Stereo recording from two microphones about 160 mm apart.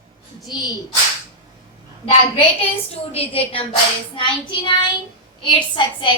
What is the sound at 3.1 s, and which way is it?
Speech, 40° left (ahead or behind).